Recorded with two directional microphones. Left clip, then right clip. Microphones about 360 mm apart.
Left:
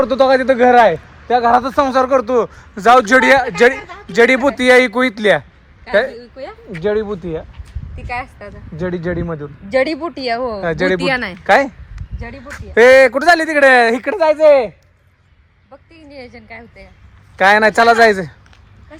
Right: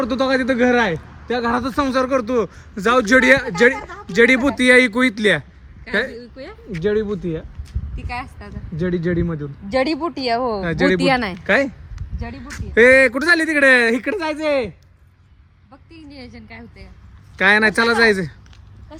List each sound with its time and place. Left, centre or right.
0.0 s a man's voice: centre
7.9 s speech: centre
8.9 s a man's voice: centre
9.6 s speech: centre
10.6 s a man's voice: centre
10.8 s speech: right
11.4 s speech: centre
11.9 s a sound: centre
12.4 s a man's voice: centre
15.9 s a man's voice: centre